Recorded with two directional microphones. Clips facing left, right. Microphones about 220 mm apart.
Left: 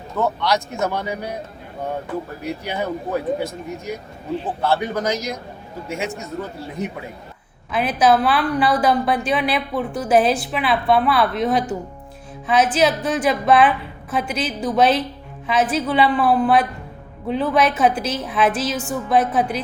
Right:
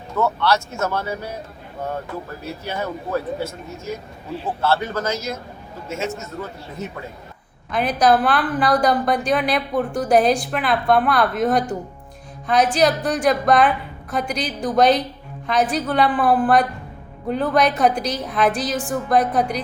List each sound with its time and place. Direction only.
0.2 s speech: 15° left (ahead or behind)
2.4 s speech: 15° left (ahead or behind)
7.7 s a woman's voice: 5° left (ahead or behind)
12.7 s a woman's voice: centre (ahead or behind)